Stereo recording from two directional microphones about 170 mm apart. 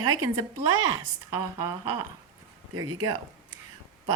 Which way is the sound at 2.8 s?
25° right (ahead or behind).